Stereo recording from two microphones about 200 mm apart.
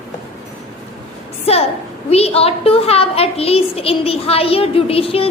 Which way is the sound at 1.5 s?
30° left (ahead or behind).